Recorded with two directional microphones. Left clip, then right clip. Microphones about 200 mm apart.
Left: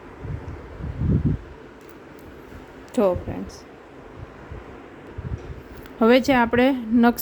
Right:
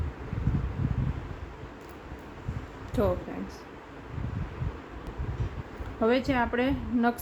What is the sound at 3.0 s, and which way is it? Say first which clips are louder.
Speech: left 8 dB; 35° left (ahead or behind).